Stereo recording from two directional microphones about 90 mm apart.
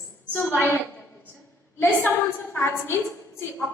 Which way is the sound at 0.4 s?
30° left (ahead or behind).